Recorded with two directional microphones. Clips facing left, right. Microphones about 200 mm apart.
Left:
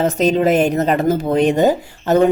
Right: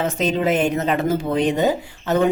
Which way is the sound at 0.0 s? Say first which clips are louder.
Left 5 dB; 40° left (ahead or behind).